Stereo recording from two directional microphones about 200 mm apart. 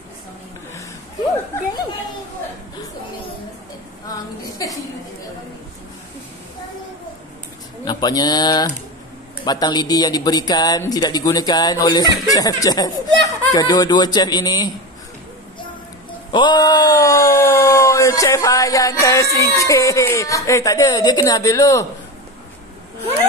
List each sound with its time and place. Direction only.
4.1 s a woman's voice: 15° left (ahead or behind)
7.8 s speech: 20° left (ahead or behind)
16.3 s speech: 20° left (ahead or behind)